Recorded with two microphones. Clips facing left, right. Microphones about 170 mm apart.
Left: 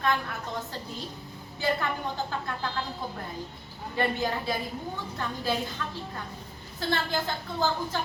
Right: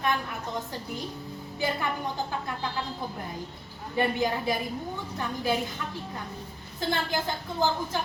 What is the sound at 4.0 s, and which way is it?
Speech, 15° right (ahead or behind).